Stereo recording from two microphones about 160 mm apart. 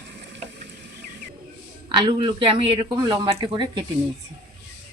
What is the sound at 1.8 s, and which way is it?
Speech, 30° right (ahead or behind).